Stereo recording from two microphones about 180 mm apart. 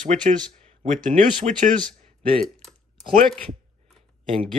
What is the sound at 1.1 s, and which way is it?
Speech, 40° right (ahead or behind).